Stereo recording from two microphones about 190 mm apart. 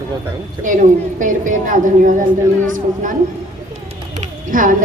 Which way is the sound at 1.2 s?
40° right (ahead or behind).